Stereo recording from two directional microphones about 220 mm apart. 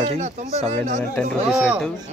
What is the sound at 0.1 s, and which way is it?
Speech, 30° right (ahead or behind).